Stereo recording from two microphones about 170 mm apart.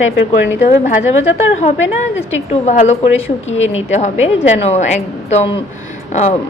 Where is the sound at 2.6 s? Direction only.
40° left (ahead or behind).